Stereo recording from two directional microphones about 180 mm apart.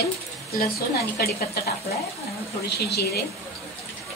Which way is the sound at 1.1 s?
60° left (ahead or behind).